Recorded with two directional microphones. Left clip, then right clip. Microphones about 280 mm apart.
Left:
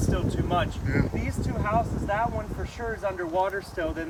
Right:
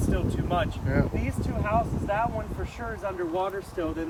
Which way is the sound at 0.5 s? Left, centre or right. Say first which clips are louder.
Even; centre.